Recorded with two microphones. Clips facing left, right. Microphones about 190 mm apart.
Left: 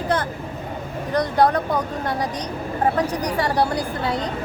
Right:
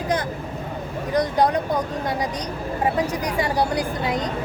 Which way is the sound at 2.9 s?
10° right (ahead or behind).